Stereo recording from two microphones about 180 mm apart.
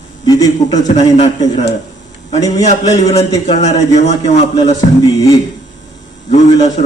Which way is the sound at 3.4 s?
40° left (ahead or behind).